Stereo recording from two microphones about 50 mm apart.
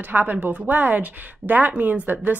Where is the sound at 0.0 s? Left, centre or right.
Right.